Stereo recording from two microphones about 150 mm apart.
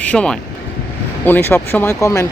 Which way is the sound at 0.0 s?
5° left (ahead or behind).